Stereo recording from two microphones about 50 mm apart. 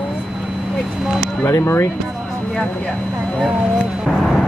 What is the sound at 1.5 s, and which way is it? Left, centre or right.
Speech, left.